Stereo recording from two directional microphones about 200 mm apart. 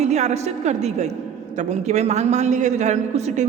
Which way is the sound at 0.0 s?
35° right (ahead or behind).